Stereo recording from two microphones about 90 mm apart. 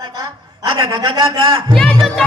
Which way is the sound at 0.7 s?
65° right (ahead or behind).